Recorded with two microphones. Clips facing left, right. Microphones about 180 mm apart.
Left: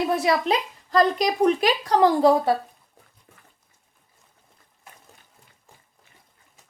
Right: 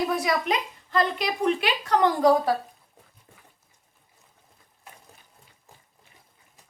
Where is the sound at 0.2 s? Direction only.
30° left (ahead or behind).